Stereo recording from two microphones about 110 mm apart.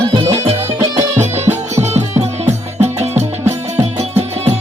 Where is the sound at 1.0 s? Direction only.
90° right.